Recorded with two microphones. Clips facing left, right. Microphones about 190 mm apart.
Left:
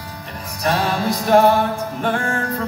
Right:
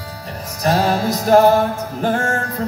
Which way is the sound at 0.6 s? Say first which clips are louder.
Right 3 dB; 40° right (ahead or behind).